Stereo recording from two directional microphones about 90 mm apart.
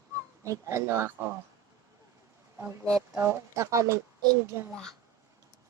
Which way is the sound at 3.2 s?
30° right (ahead or behind).